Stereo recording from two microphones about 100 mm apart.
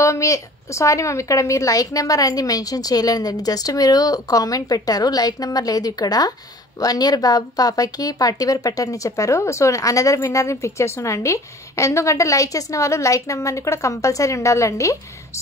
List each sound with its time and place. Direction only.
0.0 s speech: 30° left (ahead or behind)